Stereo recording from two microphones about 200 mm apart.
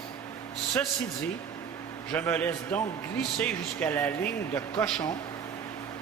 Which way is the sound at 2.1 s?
10° left (ahead or behind).